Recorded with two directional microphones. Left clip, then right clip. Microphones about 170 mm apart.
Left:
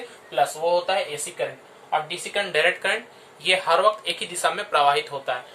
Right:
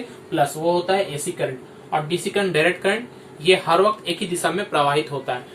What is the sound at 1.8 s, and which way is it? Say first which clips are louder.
Speech: right 2 dB; 30° left (ahead or behind).